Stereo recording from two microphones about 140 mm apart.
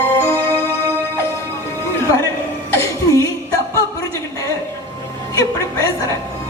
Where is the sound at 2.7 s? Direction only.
20° left (ahead or behind).